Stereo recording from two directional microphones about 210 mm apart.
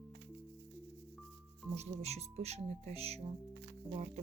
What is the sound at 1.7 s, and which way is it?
Speech, 30° right (ahead or behind).